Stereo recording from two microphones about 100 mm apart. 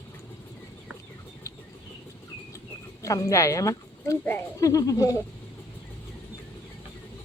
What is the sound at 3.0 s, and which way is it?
Speech, 35° left (ahead or behind).